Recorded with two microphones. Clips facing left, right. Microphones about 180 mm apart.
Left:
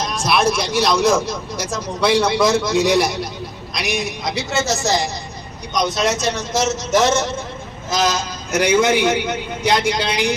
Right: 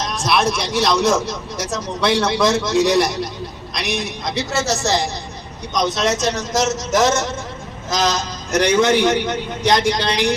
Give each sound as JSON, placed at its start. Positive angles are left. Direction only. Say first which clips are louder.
{"t": 0.0, "sound": "a man's voice", "louder": "left 1 dB", "side_deg": 0}